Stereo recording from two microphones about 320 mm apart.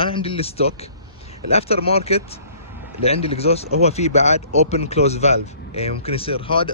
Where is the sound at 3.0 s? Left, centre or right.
Centre.